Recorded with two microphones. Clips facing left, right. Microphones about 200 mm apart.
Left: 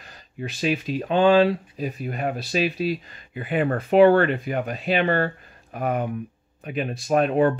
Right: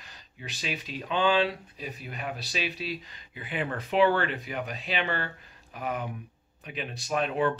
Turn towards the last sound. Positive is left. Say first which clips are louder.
# left 8 dB
turn(degrees=50)  # may be behind; listen again after turning